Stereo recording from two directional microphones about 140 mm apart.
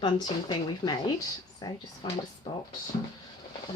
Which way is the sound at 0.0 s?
30° left (ahead or behind).